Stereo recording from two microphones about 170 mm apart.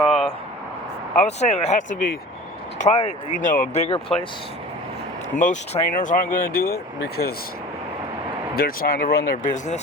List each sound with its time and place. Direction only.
0.0 s a sound: centre (ahead or behind)
1.2 s speech: 40° left (ahead or behind)
5.4 s speech: 50° left (ahead or behind); by 7.3 s 65° left (ahead or behind)
8.5 s speech: 60° left (ahead or behind); by 9.8 s 45° left (ahead or behind)